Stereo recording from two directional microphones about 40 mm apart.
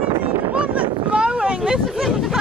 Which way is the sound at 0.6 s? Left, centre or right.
Right.